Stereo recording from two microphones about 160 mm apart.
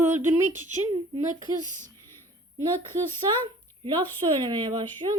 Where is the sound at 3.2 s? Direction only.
30° right (ahead or behind).